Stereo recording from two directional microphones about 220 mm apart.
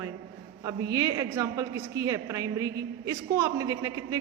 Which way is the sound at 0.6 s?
15° right (ahead or behind).